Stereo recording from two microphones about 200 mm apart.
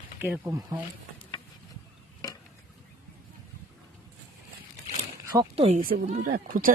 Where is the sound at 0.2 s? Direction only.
10° right (ahead or behind).